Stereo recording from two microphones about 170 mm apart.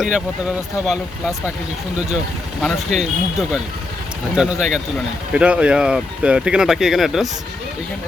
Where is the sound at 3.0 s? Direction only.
Centre (ahead or behind).